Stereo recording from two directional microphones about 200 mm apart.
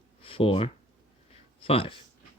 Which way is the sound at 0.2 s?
25° left (ahead or behind).